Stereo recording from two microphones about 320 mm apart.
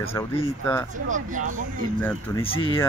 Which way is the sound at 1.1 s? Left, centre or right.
Right.